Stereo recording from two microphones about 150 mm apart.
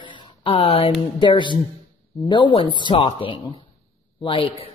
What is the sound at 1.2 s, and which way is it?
Speech, 30° left (ahead or behind).